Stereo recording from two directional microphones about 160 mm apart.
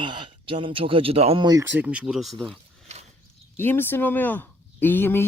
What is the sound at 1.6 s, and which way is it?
Speech, 10° right (ahead or behind).